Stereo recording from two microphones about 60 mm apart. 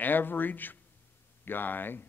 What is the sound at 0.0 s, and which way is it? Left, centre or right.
A man's voice, left.